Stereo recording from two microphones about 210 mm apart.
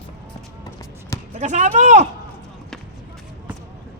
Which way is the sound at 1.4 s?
35° right (ahead or behind).